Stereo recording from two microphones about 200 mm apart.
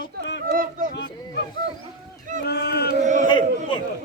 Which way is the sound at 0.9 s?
60° left (ahead or behind).